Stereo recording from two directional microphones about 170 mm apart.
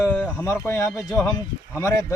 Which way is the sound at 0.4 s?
15° left (ahead or behind).